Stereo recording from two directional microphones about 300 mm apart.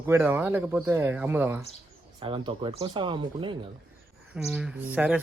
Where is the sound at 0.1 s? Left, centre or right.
Centre.